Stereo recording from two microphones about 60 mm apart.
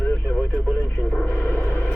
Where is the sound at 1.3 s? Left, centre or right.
Left.